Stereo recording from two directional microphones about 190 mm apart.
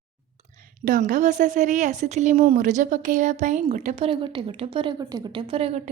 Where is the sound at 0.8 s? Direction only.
45° right (ahead or behind).